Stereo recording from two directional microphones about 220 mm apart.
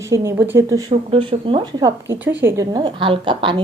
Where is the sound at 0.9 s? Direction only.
25° right (ahead or behind).